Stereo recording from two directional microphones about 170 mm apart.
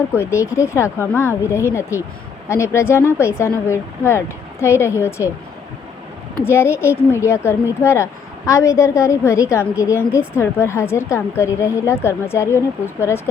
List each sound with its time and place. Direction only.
0.2 s speech: 15° left (ahead or behind)
6.4 s speech: 15° left (ahead or behind)